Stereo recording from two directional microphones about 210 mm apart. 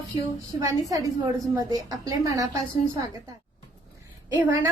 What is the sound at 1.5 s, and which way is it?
Speech, 15° right (ahead or behind).